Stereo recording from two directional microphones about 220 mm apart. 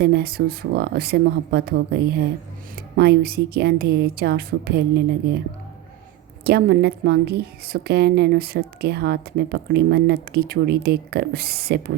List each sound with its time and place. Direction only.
0.0 s a woman's voice: 45° right (ahead or behind)
6.4 s a woman's voice: 45° right (ahead or behind)